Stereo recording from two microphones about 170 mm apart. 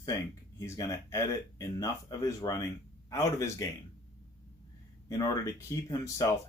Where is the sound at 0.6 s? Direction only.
20° left (ahead or behind).